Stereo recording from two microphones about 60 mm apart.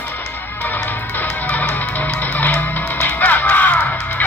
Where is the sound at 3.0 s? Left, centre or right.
Left.